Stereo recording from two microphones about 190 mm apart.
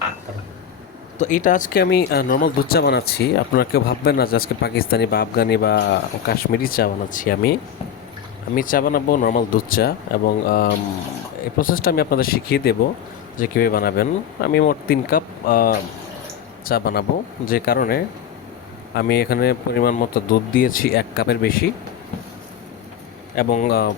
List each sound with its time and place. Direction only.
1.2 s speech: 45° left (ahead or behind)
8.5 s speech: 45° left (ahead or behind)
23.3 s speech: 45° left (ahead or behind)